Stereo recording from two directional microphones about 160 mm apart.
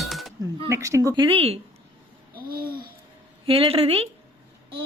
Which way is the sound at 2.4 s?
65° right (ahead or behind).